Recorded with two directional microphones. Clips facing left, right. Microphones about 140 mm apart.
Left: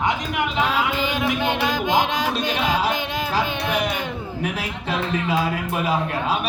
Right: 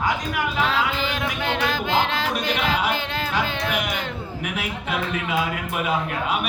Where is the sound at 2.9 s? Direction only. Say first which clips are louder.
Left 2 dB; 15° left (ahead or behind).